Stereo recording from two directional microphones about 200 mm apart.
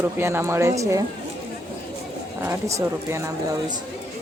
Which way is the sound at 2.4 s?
15° right (ahead or behind).